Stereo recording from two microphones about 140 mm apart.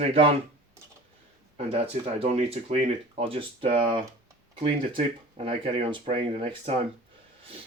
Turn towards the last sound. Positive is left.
turn(degrees=-40)  # may be behind; listen again after turning